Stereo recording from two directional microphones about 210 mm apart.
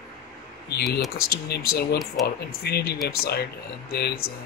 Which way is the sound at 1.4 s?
50° left (ahead or behind).